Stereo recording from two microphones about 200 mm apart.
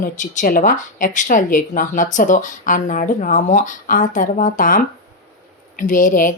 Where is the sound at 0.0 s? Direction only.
40° left (ahead or behind).